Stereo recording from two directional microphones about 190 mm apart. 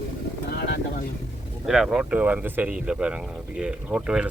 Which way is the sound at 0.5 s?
60° left (ahead or behind).